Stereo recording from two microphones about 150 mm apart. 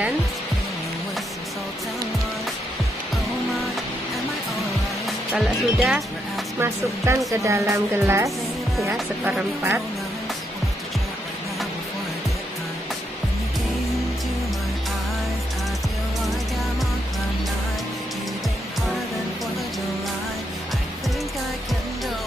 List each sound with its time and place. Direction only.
5.3 s speech: centre (ahead or behind)
6.6 s speech: 20° right (ahead or behind)